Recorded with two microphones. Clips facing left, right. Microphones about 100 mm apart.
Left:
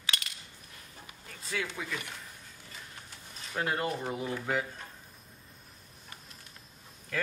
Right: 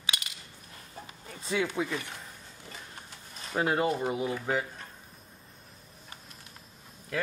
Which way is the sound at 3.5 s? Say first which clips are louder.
Right 5 dB; 10° right (ahead or behind).